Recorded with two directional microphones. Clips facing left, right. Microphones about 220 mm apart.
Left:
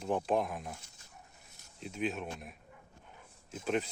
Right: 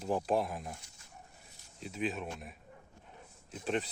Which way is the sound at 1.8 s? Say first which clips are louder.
Even; centre (ahead or behind).